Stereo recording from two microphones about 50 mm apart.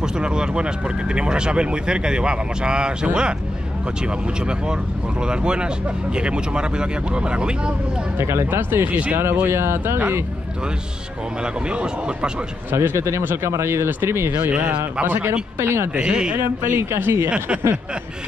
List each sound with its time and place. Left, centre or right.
0.0 s speech: centre
5.2 s speech: centre
8.2 s speech: right
11.7 s speech: right
12.7 s speech: right
13.2 s speech: right
13.5 s speech: right
14.4 s speech: right
15.6 s speech: right
15.9 s speech: centre
16.3 s speech: right